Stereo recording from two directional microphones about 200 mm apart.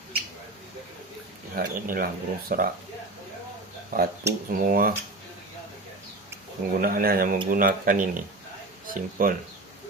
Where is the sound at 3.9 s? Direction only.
45° right (ahead or behind).